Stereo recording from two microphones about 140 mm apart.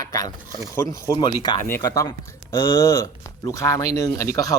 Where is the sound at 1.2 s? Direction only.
35° left (ahead or behind).